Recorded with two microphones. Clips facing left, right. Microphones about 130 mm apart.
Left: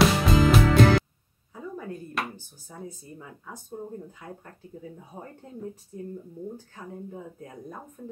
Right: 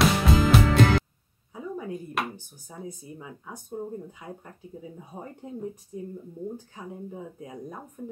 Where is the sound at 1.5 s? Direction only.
15° right (ahead or behind).